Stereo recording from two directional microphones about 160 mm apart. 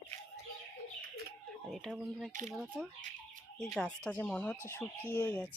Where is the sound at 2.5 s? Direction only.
5° right (ahead or behind).